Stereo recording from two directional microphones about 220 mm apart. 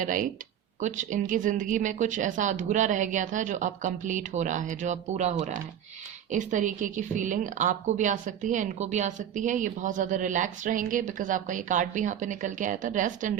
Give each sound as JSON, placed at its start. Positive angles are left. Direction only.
{"t": 0.0, "sound": "a woman's voice", "side_deg": -35}